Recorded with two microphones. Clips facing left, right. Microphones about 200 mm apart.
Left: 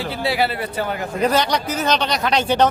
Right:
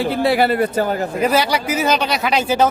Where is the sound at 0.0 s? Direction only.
55° right (ahead or behind).